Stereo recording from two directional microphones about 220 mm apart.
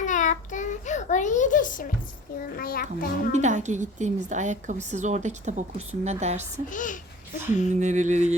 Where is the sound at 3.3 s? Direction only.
30° right (ahead or behind).